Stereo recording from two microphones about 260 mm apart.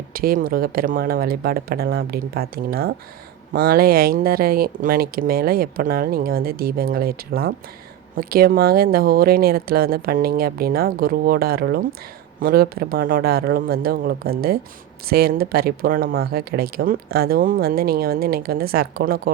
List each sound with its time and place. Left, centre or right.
0.1 s speech: right